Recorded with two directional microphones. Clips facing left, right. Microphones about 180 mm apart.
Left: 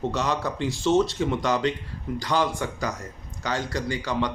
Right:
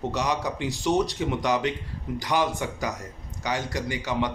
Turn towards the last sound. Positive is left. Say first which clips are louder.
# left 1 dB
turn(degrees=-20)  # may be behind; listen again after turning